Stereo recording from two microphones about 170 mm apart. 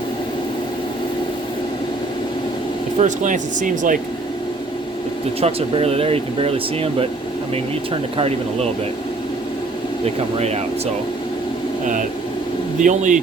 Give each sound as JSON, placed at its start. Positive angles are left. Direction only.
{"t": 3.0, "sound": "speech", "side_deg": -50}
{"t": 5.4, "sound": "speech", "side_deg": -35}
{"t": 10.3, "sound": "speech", "side_deg": -40}
{"t": 12.8, "sound": "speech", "side_deg": -50}